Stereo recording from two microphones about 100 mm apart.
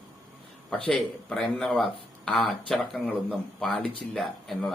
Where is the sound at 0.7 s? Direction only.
10° left (ahead or behind).